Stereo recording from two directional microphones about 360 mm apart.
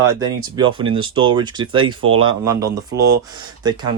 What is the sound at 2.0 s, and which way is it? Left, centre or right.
Speech, right.